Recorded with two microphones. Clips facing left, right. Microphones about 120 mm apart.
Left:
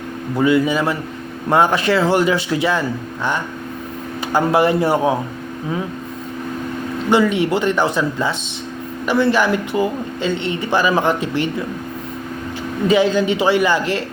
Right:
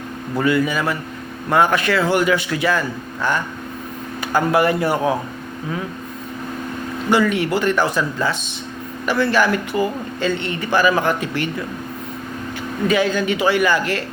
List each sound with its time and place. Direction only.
0.3 s speech: 20° left (ahead or behind)
4.3 s speech: 25° left (ahead or behind)
7.1 s speech: 25° left (ahead or behind)
12.9 s speech: 25° left (ahead or behind)